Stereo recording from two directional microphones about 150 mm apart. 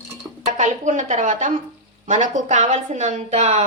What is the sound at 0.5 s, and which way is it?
A woman's voice, 55° right (ahead or behind).